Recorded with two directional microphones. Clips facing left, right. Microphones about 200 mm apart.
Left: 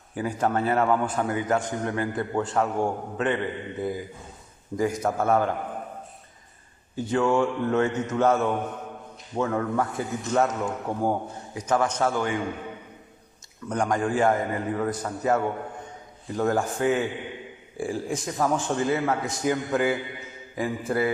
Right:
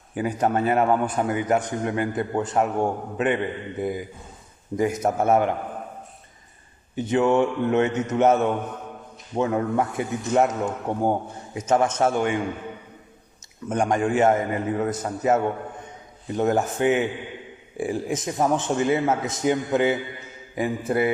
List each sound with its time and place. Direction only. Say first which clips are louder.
0.1 s a man's voice: right 2 dB; 20° right (ahead or behind)
4.8 s a man's voice: right 2 dB; 20° right (ahead or behind)
6.9 s a man's voice: right 3 dB; 20° right (ahead or behind)
10.5 s speech: right 2 dB; centre (ahead or behind)
10.8 s a man's voice: right 3 dB; 20° right (ahead or behind)
13.7 s a man's voice: right 3 dB; 25° right (ahead or behind)